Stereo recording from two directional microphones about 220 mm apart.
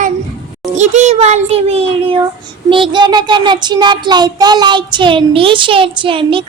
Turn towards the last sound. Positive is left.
turn(degrees=-25)  # may be behind; listen again after turning